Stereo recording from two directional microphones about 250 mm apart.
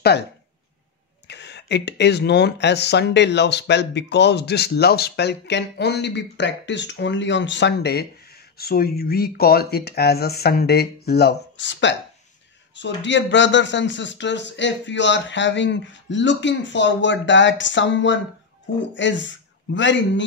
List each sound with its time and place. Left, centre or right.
1.2 s speech: left